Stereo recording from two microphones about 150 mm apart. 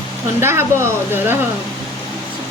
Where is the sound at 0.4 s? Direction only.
15° right (ahead or behind).